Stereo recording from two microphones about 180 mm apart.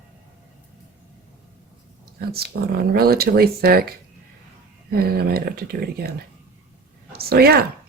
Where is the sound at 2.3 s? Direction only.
60° right (ahead or behind).